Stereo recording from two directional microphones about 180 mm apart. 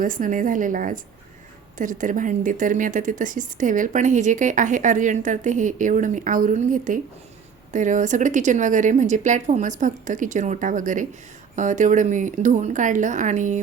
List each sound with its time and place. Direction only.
0.0 s speech: 50° right (ahead or behind)